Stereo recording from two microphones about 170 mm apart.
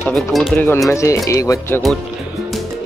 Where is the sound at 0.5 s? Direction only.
15° left (ahead or behind).